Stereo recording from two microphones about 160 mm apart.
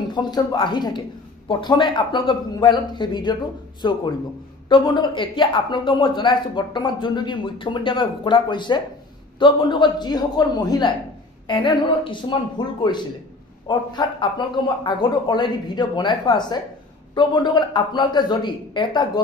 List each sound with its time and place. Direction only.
0.1 s a woman's voice: 25° left (ahead or behind)